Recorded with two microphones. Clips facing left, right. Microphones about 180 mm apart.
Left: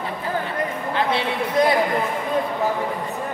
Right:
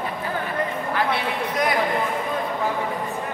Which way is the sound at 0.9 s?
25° left (ahead or behind).